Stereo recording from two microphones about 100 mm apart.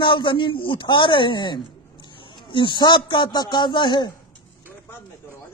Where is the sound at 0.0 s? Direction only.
55° left (ahead or behind).